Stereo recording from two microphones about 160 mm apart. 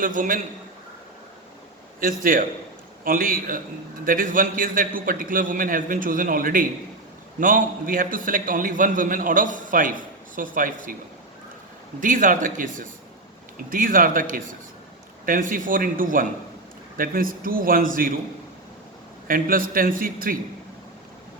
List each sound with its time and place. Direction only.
0.0 s a man's voice: 55° right (ahead or behind)
2.0 s a man's voice: 60° right (ahead or behind)
11.9 s a man's voice: 55° right (ahead or behind)
19.3 s a man's voice: 60° right (ahead or behind)